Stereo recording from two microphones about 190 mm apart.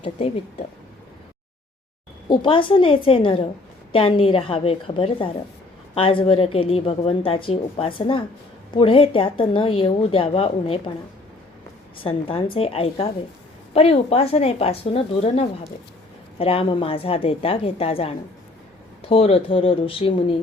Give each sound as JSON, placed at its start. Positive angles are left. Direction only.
{"t": 0.0, "sound": "a woman's voice", "side_deg": 30}
{"t": 2.3, "sound": "a woman's voice", "side_deg": 25}
{"t": 11.9, "sound": "a woman's voice", "side_deg": 30}